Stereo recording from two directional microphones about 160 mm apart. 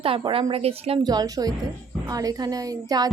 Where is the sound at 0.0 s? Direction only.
35° right (ahead or behind).